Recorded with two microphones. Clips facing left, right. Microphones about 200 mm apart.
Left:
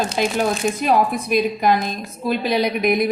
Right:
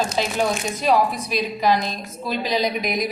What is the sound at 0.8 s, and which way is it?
A woman's voice, 55° left (ahead or behind).